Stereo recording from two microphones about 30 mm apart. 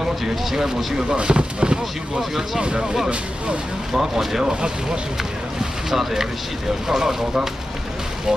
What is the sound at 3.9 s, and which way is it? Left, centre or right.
Speech, centre.